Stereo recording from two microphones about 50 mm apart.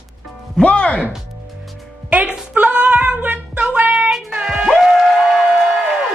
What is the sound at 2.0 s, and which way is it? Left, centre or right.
A woman's voice, right.